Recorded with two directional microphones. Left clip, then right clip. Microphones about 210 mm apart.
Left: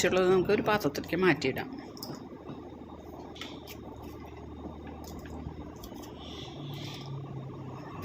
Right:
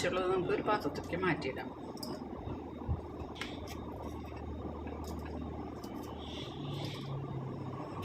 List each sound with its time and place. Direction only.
0.0 s speech: 45° left (ahead or behind)